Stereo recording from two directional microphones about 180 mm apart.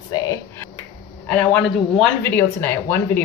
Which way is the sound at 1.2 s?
5° left (ahead or behind).